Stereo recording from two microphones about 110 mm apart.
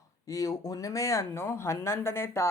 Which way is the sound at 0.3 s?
30° left (ahead or behind).